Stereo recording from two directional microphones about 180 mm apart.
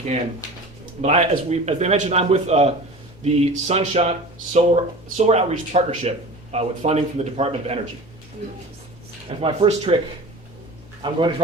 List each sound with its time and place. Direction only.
1.0 s speech: 35° right (ahead or behind)
9.4 s speech: 35° right (ahead or behind)
11.0 s a man's voice: 25° right (ahead or behind)